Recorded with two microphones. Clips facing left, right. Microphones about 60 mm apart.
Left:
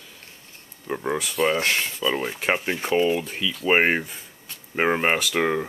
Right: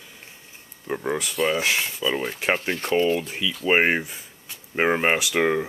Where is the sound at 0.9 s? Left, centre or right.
Centre.